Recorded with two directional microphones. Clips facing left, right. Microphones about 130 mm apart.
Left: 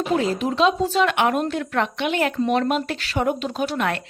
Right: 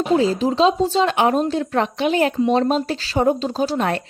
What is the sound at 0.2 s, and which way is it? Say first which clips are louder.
A woman's voice: right 3 dB; 30° right (ahead or behind).